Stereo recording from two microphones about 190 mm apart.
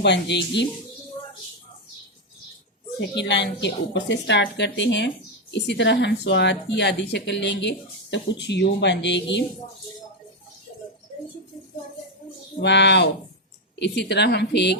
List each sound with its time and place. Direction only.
0.0 s a woman's voice: 65° left (ahead or behind)
3.2 s a woman's voice: 65° left (ahead or behind)
12.5 s a woman's voice: 65° left (ahead or behind)